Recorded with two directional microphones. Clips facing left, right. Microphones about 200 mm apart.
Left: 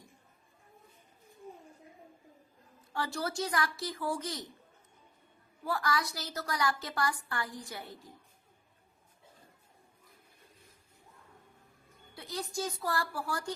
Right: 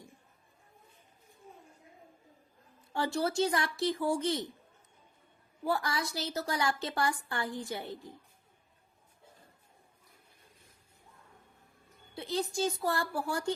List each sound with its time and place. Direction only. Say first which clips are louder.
2.9 s a woman's voice: right 4 dB; 25° right (ahead or behind)
5.6 s a woman's voice: right 1 dB; 25° right (ahead or behind)
12.1 s a woman's voice: right 5 dB; 25° right (ahead or behind)